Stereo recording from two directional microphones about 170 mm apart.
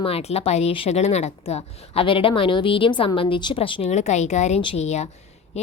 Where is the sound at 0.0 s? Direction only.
35° left (ahead or behind).